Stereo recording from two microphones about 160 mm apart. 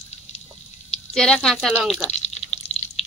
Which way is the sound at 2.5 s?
40° left (ahead or behind).